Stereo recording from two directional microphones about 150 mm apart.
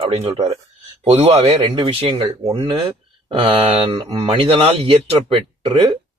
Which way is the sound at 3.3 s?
35° right (ahead or behind).